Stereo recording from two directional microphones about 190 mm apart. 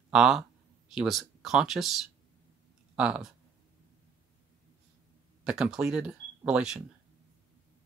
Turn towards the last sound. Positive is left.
turn(degrees=-5)  # may be behind; listen again after turning